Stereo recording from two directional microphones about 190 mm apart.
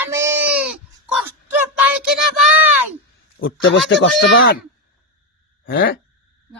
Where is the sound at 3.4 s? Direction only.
90° left.